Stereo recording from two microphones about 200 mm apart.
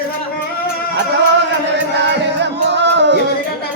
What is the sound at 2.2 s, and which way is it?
Music, 60° right (ahead or behind).